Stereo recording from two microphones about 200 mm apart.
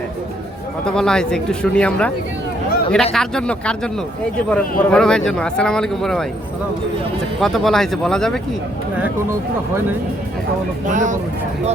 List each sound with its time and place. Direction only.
0.9 s a man's voice: 5° left (ahead or behind)
4.8 s a man's voice: 5° left (ahead or behind)
7.3 s a man's voice: centre (ahead or behind)
10.8 s speech: 40° right (ahead or behind)